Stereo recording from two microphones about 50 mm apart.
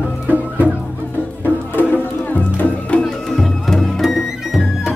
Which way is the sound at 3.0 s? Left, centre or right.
Centre.